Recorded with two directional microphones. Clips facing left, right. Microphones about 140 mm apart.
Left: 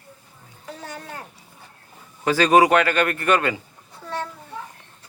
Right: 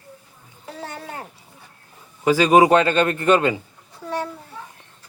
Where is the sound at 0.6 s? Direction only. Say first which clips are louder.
Right 2 dB; 25° right (ahead or behind).